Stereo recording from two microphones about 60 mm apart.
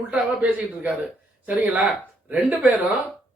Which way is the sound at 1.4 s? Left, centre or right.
Right.